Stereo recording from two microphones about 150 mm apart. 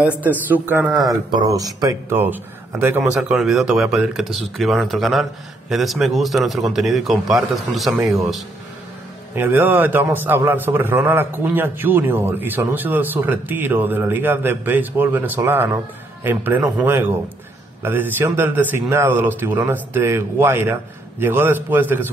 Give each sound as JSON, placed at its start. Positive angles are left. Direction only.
{"t": 0.2, "sound": "a man's voice", "side_deg": -10}
{"t": 1.3, "sound": "a man's voice", "side_deg": -25}
{"t": 3.2, "sound": "a man's voice", "side_deg": -5}
{"t": 9.3, "sound": "a man's voice", "side_deg": -15}